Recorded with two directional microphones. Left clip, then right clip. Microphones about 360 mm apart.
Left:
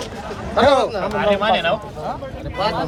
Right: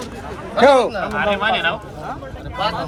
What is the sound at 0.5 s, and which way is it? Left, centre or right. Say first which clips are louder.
Speech: right 2 dB; left.